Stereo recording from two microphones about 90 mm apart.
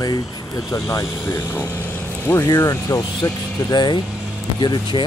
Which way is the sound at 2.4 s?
40° left (ahead or behind).